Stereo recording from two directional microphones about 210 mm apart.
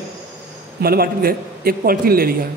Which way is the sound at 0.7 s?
45° right (ahead or behind).